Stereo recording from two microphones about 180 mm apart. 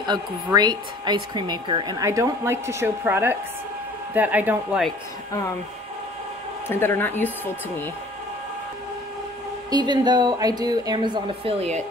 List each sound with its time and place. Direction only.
0.0 s speech: 25° right (ahead or behind)
6.7 s speech: 10° left (ahead or behind)
9.7 s speech: 25° right (ahead or behind)